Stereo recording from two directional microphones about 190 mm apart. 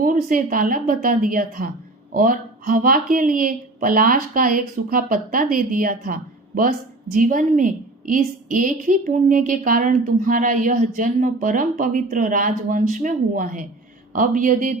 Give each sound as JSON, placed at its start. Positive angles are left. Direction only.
{"t": 0.0, "sound": "a woman's voice", "side_deg": -45}